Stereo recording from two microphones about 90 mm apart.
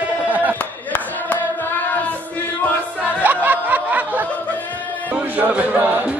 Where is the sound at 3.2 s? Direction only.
20° right (ahead or behind).